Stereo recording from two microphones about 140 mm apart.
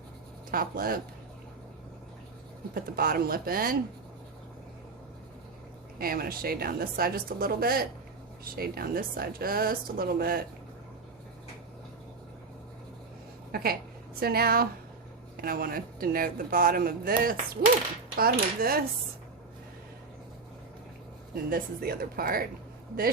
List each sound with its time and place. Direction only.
0.5 s speech: 90° right
2.7 s speech: 90° right
6.0 s speech: 90° right
13.5 s a woman's voice: 90° right
21.5 s speech: 90° right